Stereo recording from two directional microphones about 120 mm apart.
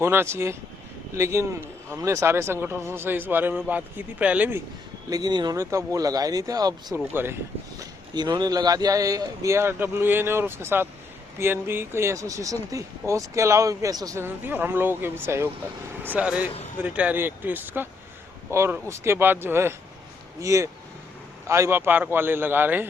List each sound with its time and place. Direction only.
0.0 s a man's voice: 20° right (ahead or behind)
5.0 s speech: 35° right (ahead or behind)
7.1 s speech: 20° right (ahead or behind)
7.8 s speech: 35° right (ahead or behind)
14.3 s a man's voice: 15° right (ahead or behind)